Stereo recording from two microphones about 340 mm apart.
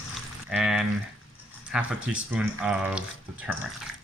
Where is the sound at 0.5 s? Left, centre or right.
Centre.